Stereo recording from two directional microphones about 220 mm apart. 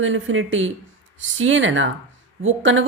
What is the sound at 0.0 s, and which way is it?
Speech, 60° right (ahead or behind).